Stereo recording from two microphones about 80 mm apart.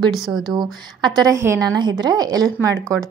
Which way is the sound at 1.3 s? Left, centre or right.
Right.